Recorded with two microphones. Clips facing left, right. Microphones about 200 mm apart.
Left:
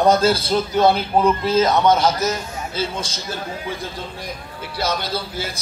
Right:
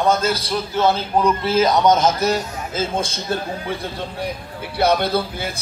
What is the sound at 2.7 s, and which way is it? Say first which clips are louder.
Speech: right 4 dB; 50° right (ahead or behind).